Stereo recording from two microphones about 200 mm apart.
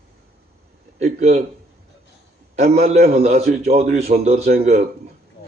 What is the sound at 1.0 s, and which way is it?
Speech, 35° right (ahead or behind).